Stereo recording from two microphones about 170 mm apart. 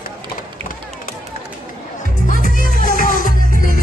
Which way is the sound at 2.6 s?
50° left (ahead or behind).